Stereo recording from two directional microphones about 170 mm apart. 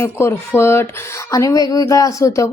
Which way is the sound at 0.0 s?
15° left (ahead or behind).